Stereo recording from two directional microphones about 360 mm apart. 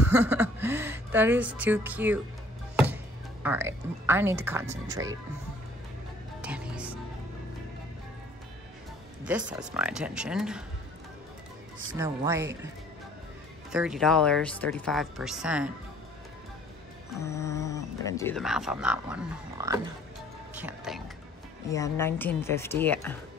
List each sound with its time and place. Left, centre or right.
0.1 s speech: centre
2.7 s music: centre
3.4 s a woman's voice: centre
6.4 s music: centre
9.2 s speech: centre
12.0 s a woman's voice: centre
13.7 s speech: centre
17.1 s speech: centre
21.6 s speech: centre